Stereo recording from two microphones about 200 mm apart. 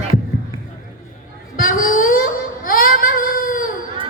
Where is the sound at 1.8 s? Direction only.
45° left (ahead or behind).